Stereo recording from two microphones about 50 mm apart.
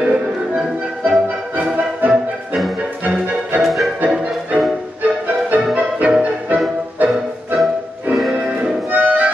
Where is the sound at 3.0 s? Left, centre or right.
Right.